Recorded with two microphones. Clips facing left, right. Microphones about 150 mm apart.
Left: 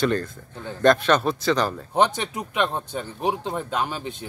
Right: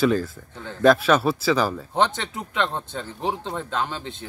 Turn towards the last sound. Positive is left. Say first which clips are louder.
# left 1 dB
turn(degrees=15)  # may be behind; listen again after turning